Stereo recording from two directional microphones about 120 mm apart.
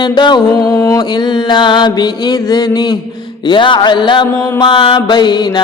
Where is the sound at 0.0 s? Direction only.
40° left (ahead or behind).